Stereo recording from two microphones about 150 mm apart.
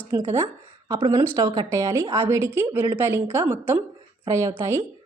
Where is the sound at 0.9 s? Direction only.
30° right (ahead or behind).